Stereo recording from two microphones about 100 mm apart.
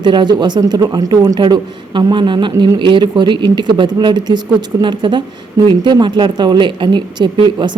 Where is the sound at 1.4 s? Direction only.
50° right (ahead or behind).